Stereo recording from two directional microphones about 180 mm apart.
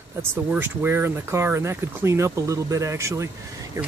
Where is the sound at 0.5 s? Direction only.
10° right (ahead or behind).